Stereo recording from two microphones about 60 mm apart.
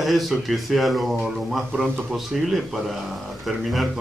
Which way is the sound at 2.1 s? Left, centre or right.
Centre.